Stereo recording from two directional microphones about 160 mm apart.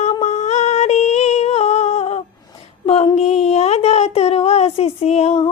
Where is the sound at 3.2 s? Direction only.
40° left (ahead or behind).